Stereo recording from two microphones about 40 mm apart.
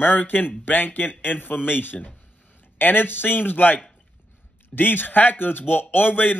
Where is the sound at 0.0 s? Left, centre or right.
Left.